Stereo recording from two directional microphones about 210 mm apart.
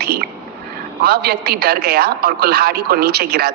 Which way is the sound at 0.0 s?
50° right (ahead or behind).